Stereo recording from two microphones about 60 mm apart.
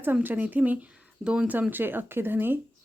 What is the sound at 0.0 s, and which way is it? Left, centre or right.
Speech, right.